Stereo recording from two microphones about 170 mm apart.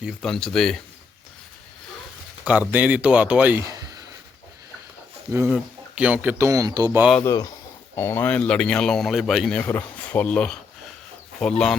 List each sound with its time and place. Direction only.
0.0 s speech: centre (ahead or behind)
2.4 s speech: 10° right (ahead or behind)
5.3 s speech: 15° right (ahead or behind)
7.2 s speech: 20° left (ahead or behind); by 11.8 s 5° left (ahead or behind)